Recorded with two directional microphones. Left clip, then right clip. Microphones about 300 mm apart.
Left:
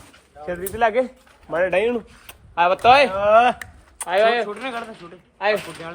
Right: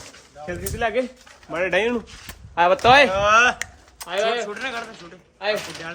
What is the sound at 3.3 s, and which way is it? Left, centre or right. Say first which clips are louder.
Speech: left 3 dB; centre.